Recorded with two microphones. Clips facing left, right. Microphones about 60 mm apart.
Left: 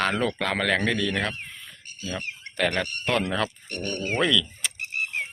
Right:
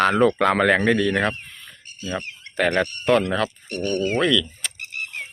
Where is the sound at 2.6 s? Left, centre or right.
Centre.